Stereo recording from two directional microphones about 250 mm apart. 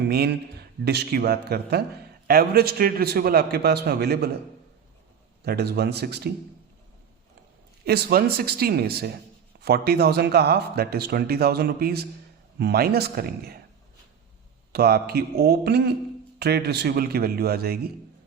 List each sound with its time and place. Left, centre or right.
0.1 s speech: right
5.4 s speech: right
7.9 s speech: right
14.7 s speech: right